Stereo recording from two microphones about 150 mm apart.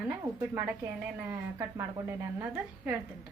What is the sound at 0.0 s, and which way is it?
A woman's voice, 15° right (ahead or behind).